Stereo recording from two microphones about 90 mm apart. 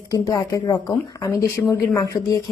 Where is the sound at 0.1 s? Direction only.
45° left (ahead or behind).